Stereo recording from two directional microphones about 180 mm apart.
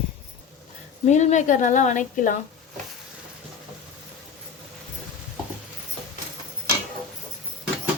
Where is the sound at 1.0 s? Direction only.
40° left (ahead or behind).